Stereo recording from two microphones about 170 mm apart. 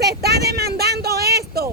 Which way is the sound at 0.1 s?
70° right (ahead or behind).